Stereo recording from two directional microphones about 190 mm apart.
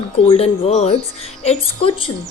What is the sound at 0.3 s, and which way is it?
A woman's voice, 30° left (ahead or behind).